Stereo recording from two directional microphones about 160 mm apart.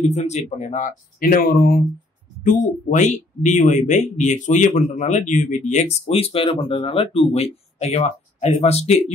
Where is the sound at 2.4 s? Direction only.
50° left (ahead or behind).